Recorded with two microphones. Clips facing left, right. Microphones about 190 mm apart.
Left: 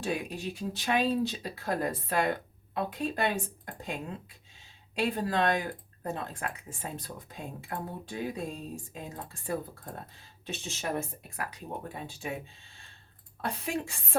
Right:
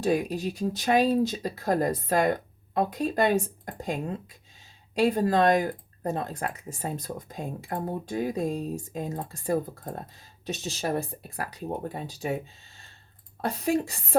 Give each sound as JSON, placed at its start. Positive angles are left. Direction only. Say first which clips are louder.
{"t": 0.0, "sound": "speech", "louder": "right 8 dB", "side_deg": -40}
{"t": 13.4, "sound": "speech", "louder": "right 7 dB", "side_deg": -40}